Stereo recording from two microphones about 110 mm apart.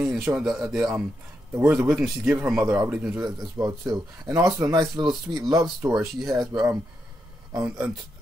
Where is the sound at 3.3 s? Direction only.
35° right (ahead or behind).